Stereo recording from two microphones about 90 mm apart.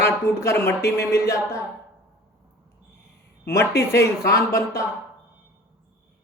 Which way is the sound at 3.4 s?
35° left (ahead or behind).